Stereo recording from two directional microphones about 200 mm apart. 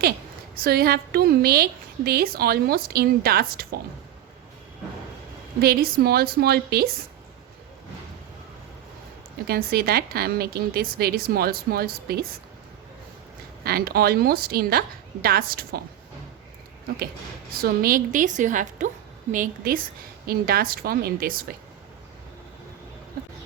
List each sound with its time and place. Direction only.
0.5 s a woman's voice: 50° right (ahead or behind)
5.5 s a woman's voice: 50° right (ahead or behind)
9.5 s a woman's voice: 50° right (ahead or behind)
13.7 s a woman's voice: 50° right (ahead or behind)
17.6 s a woman's voice: 45° right (ahead or behind)